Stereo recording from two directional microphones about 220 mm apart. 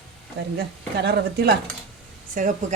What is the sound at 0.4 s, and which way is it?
Speech, 50° right (ahead or behind).